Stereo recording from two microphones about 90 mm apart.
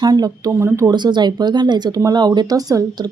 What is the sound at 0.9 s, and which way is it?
A woman's voice, 55° right (ahead or behind).